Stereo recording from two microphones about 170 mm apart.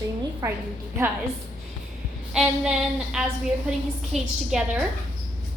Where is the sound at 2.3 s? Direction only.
5° right (ahead or behind).